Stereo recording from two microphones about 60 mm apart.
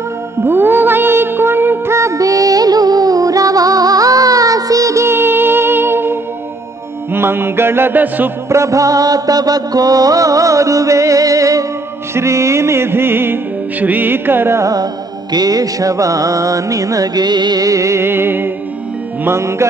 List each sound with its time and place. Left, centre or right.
0.5 s music: right
2.0 s music: right
5.0 s music: right
8.5 s music: right
12.1 s music: right
14.6 s music: right
18.0 s music: right
19.2 s music: right